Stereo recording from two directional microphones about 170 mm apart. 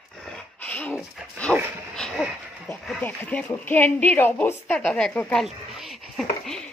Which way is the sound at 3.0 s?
10° left (ahead or behind).